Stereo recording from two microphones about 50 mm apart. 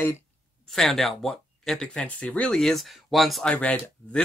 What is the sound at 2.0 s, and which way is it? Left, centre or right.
Speech, left.